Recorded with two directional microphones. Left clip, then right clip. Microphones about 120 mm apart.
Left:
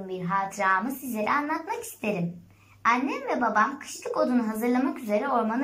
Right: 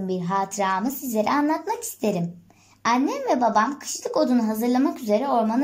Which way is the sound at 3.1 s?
55° right (ahead or behind).